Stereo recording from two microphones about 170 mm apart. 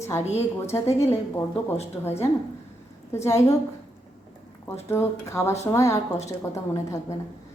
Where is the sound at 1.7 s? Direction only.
40° left (ahead or behind).